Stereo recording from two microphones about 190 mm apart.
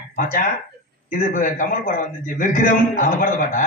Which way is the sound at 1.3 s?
40° left (ahead or behind).